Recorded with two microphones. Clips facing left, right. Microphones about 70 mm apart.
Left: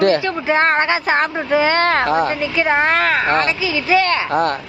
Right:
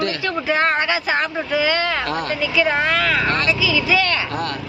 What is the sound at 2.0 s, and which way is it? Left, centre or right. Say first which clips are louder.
Speech: left 5 dB; left.